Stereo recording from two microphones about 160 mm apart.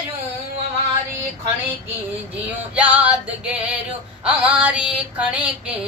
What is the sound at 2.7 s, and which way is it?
Music, 10° right (ahead or behind).